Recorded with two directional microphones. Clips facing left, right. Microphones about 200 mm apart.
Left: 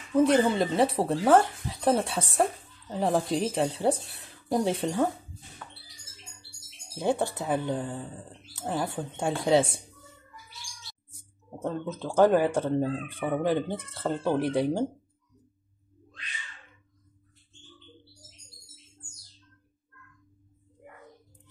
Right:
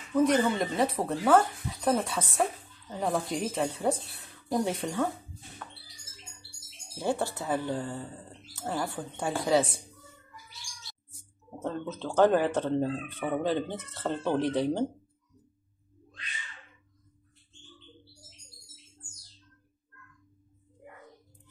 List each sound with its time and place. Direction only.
0.1 s a woman's voice: 30° left (ahead or behind)
7.0 s a woman's voice: 20° left (ahead or behind)
11.6 s speech: 10° left (ahead or behind)